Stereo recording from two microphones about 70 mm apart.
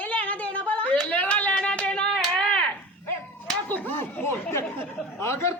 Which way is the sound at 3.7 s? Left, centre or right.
Left.